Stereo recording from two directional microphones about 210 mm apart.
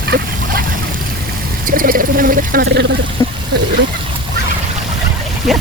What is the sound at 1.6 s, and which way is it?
Speech, 40° right (ahead or behind).